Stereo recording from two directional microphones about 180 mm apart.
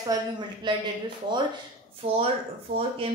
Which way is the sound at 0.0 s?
25° right (ahead or behind).